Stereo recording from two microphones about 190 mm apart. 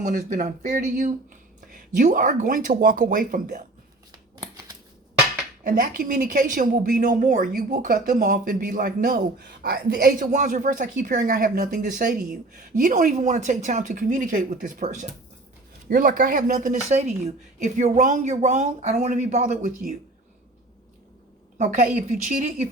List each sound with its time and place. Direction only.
0.0 s speech: 45° right (ahead or behind)
4.4 s shuffling cards: 20° right (ahead or behind)
5.6 s a woman's voice: 45° right (ahead or behind)
21.6 s speech: 45° right (ahead or behind)